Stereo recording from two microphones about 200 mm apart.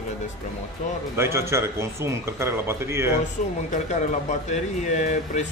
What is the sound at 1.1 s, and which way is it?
Speech, 15° right (ahead or behind).